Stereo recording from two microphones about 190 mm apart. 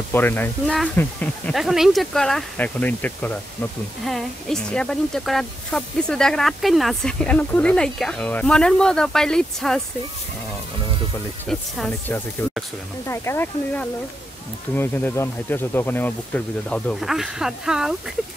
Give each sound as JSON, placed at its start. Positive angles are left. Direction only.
{"t": 0.1, "sound": "speech", "side_deg": 10}
{"t": 11.4, "sound": "speech", "side_deg": 0}
{"t": 13.1, "sound": "speech", "side_deg": 15}